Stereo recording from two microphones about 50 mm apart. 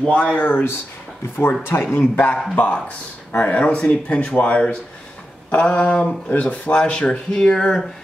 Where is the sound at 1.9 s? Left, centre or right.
Left.